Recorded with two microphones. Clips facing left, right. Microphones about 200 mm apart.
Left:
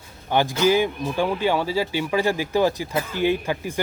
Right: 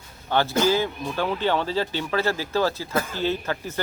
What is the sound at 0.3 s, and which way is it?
Speech, 15° left (ahead or behind).